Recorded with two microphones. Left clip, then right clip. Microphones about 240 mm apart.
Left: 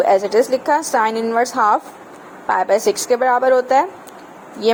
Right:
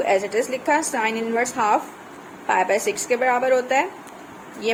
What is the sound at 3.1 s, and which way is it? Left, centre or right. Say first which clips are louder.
Speech: left 4 dB; left.